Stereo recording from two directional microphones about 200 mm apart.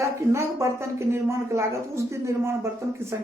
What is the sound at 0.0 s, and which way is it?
A woman's voice, 15° right (ahead or behind).